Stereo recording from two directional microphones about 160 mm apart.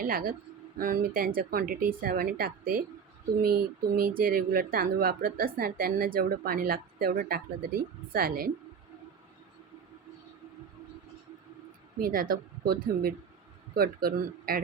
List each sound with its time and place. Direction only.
0.0 s speech: 65° right (ahead or behind)
11.9 s speech: 65° right (ahead or behind)